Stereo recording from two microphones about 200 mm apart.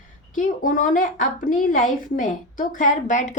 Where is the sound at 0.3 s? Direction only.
40° left (ahead or behind).